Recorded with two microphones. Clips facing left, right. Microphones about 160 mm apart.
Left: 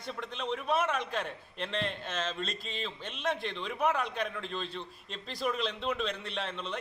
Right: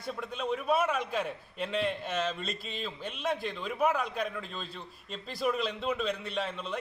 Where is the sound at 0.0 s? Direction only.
5° right (ahead or behind).